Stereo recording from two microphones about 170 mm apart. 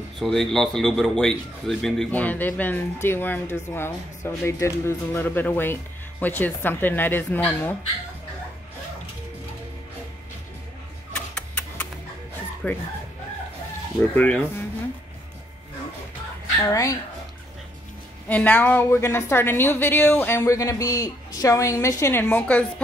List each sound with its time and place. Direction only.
0.2 s a man's voice: 5° left (ahead or behind)
11.1 s a sound: 5° left (ahead or behind)
12.6 s speech: 5° left (ahead or behind)
14.1 s a man's voice: 10° left (ahead or behind)
16.6 s speech: 20° left (ahead or behind)
18.3 s a man's voice: 10° left (ahead or behind)